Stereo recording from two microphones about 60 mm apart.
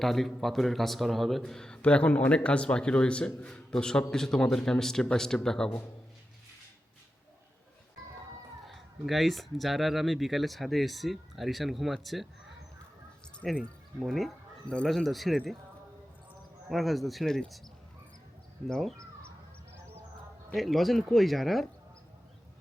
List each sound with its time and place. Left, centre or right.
0.0 s speech: centre
8.6 s speech: centre
13.4 s speech: centre
16.6 s speech: centre
20.5 s speech: centre